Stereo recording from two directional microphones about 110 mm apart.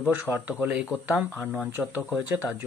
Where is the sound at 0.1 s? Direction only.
15° right (ahead or behind).